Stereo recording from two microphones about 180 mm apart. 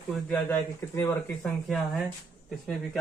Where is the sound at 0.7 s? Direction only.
15° left (ahead or behind).